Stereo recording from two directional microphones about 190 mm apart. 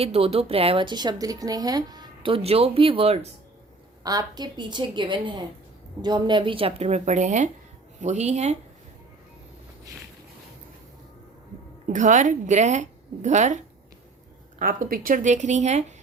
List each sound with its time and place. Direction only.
0.0 s a woman's voice: 30° right (ahead or behind)
4.0 s a woman's voice: 20° right (ahead or behind); by 8.5 s 35° right (ahead or behind)
11.9 s a woman's voice: 40° right (ahead or behind)
14.6 s a woman's voice: 50° right (ahead or behind)